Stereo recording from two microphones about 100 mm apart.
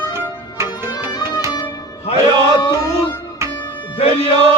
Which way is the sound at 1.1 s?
45° left (ahead or behind).